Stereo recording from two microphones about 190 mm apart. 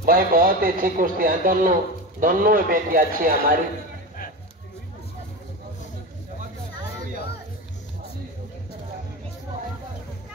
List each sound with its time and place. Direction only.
0.0 s a man's voice: 50° right (ahead or behind)